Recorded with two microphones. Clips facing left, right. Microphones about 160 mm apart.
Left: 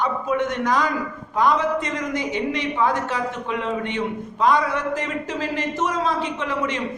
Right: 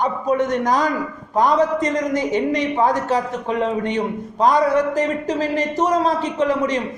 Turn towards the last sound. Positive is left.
turn(degrees=-40)  # may be behind; listen again after turning